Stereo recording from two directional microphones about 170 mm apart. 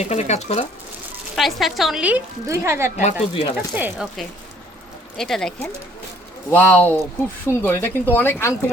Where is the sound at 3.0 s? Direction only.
35° left (ahead or behind).